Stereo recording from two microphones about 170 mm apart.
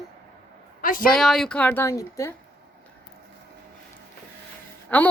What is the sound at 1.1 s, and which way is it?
Speech, centre (ahead or behind).